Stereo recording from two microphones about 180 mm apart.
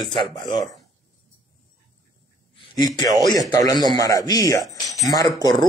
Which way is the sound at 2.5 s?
30° left (ahead or behind).